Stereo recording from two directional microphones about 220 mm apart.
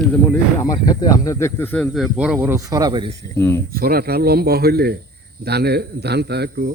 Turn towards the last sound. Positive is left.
turn(degrees=-50)  # may be behind; listen again after turning